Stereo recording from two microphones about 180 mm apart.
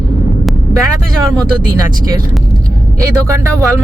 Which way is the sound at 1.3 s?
20° right (ahead or behind).